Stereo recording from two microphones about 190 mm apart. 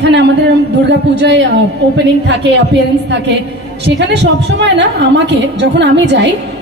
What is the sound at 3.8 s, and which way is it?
A woman's voice, 65° right (ahead or behind).